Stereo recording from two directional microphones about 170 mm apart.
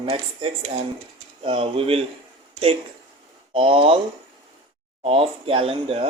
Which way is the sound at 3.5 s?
30° right (ahead or behind).